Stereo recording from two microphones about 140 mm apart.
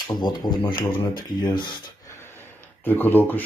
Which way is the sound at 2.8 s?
15° left (ahead or behind).